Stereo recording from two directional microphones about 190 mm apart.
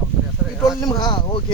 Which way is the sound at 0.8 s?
25° left (ahead or behind).